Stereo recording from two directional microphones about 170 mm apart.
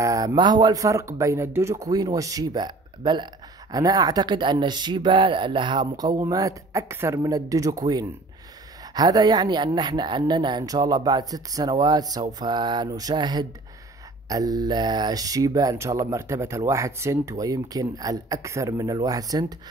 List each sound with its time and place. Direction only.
0.0 s speech: 20° right (ahead or behind)